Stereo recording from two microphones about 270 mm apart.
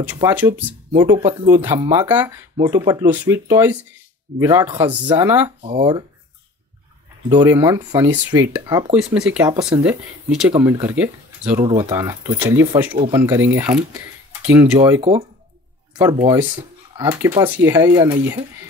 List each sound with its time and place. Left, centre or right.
0.1 s speech: centre
5.6 s speech: centre
7.2 s speech: centre
11.6 s speech: centre